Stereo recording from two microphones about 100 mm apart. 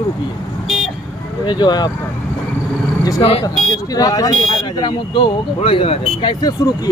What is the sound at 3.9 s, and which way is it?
Speech, 40° left (ahead or behind).